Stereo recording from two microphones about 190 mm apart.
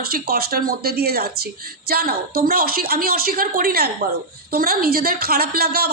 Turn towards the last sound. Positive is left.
turn(degrees=-55)  # may be behind; listen again after turning